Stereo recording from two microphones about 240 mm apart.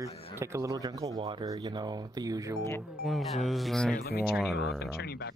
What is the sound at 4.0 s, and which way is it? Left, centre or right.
Speech, left.